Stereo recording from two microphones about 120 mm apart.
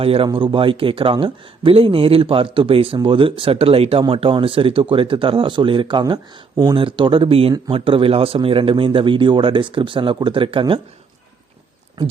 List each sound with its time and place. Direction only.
0.0 s speech: 50° right (ahead or behind)